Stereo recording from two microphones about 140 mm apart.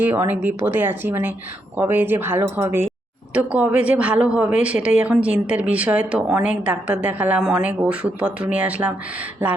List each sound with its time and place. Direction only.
0.0 s speech: 15° right (ahead or behind)